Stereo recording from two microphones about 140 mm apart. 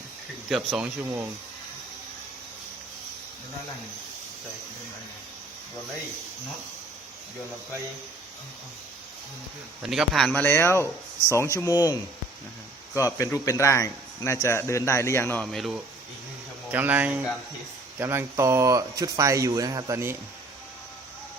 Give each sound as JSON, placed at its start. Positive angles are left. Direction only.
{"t": 0.7, "sound": "speech", "side_deg": -15}
{"t": 9.8, "sound": "a man's voice", "side_deg": -5}
{"t": 10.3, "sound": "speech", "side_deg": 15}
{"t": 13.1, "sound": "speech", "side_deg": 20}
{"t": 15.5, "sound": "a man's voice", "side_deg": 0}
{"t": 16.7, "sound": "speech", "side_deg": -10}